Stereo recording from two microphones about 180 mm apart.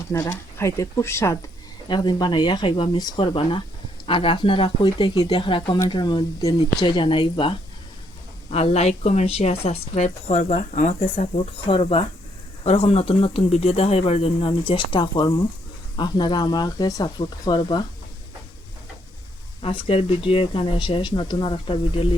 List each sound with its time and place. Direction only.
0.1 s a woman's voice: 15° left (ahead or behind)
19.6 s speech: 30° left (ahead or behind)